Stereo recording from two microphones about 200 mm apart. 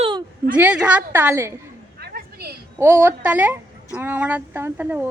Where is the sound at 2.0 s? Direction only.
50° right (ahead or behind).